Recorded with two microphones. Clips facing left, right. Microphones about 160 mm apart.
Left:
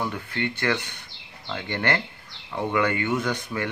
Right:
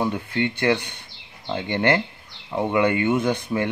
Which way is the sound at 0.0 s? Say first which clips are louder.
Right 5 dB; 20° right (ahead or behind).